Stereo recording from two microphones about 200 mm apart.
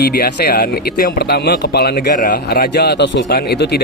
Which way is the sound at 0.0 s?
50° left (ahead or behind).